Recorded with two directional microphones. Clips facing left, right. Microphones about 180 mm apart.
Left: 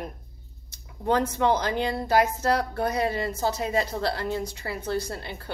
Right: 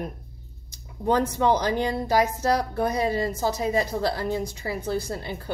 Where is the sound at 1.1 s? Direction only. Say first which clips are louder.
Right 1 dB; 15° right (ahead or behind).